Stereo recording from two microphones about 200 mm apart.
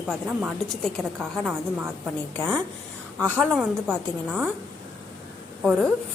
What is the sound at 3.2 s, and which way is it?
A woman's voice, 10° right (ahead or behind).